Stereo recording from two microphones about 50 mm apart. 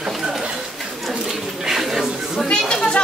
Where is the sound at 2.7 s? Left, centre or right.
Centre.